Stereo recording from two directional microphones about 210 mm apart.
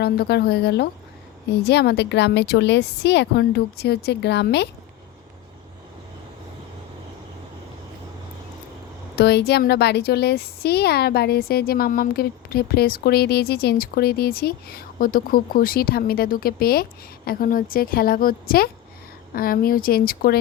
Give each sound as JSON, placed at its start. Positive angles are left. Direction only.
{"t": 0.0, "sound": "speech", "side_deg": 50}
{"t": 9.1, "sound": "speech", "side_deg": 55}